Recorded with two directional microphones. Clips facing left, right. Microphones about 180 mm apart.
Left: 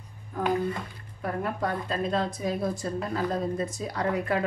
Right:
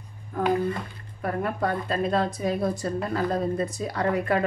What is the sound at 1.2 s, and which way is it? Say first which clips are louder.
A woman's voice: right 3 dB; 60° right (ahead or behind).